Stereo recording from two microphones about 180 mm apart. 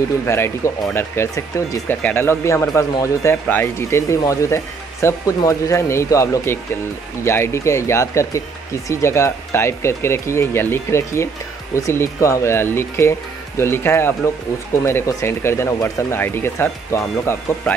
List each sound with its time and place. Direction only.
0.8 s speech: 15° left (ahead or behind)